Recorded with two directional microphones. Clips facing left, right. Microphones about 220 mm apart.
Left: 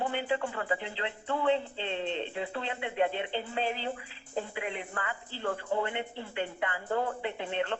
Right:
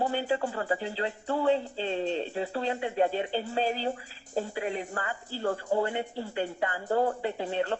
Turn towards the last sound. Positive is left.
turn(degrees=-40)  # may be behind; listen again after turning